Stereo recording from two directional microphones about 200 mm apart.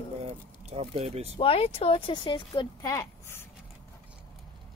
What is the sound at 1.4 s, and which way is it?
Speech, 25° left (ahead or behind).